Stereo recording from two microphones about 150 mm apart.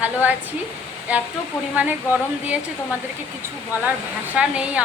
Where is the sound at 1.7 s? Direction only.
10° right (ahead or behind).